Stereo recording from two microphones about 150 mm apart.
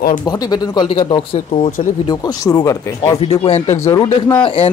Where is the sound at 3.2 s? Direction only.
40° left (ahead or behind).